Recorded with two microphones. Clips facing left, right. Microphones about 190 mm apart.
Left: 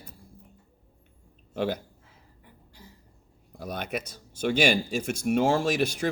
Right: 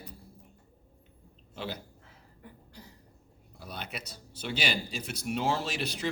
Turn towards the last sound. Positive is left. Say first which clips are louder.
# left 7 dB
turn(degrees=50)  # may be behind; listen again after turning